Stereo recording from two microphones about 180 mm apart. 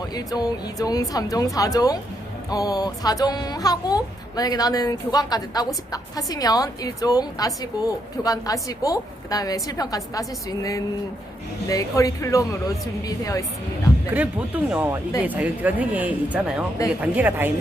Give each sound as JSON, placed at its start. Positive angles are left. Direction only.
{"t": 0.1, "sound": "speech", "side_deg": 20}
{"t": 14.1, "sound": "speech", "side_deg": -10}